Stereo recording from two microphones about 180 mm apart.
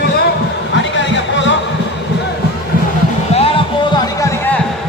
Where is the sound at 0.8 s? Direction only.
90° left.